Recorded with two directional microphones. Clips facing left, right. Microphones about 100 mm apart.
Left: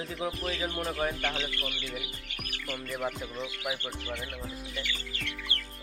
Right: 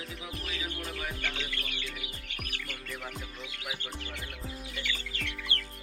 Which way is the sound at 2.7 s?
35° left (ahead or behind).